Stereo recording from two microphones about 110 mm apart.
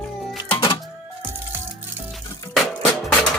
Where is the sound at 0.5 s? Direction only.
45° left (ahead or behind).